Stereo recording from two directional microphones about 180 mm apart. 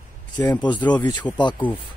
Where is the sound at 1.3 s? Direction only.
10° left (ahead or behind).